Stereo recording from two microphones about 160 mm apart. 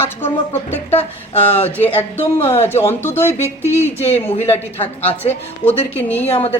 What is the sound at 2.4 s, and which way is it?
Speech, 40° left (ahead or behind).